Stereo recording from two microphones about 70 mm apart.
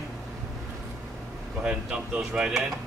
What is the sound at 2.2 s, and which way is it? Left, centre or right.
Speech, centre.